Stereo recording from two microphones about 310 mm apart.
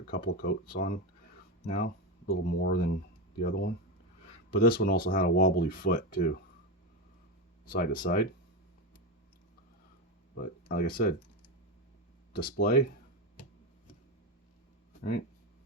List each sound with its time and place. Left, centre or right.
0.1 s speech: left
7.6 s speech: left
10.3 s speech: left
12.3 s speech: left